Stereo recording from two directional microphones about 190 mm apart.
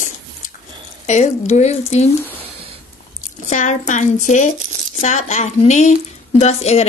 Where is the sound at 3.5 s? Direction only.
40° left (ahead or behind).